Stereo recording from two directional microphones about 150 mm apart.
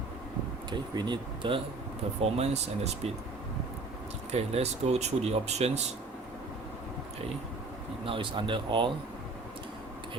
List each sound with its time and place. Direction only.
0.7 s speech: 30° right (ahead or behind)
2.2 s speech: 45° right (ahead or behind)
4.3 s speech: 45° right (ahead or behind)
8.0 s speech: 35° right (ahead or behind)